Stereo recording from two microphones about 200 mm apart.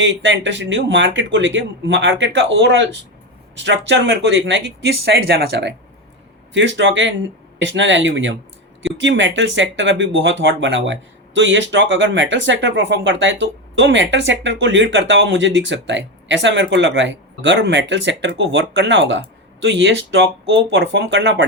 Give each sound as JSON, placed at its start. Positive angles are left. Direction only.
{"t": 0.0, "sound": "speech", "side_deg": -65}